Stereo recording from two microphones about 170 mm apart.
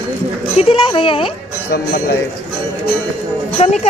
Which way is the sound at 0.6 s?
30° left (ahead or behind).